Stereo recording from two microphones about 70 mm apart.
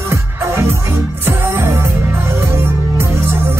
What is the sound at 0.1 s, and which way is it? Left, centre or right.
Music, right.